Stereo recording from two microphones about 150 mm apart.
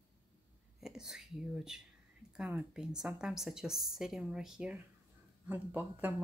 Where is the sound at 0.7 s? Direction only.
5° right (ahead or behind).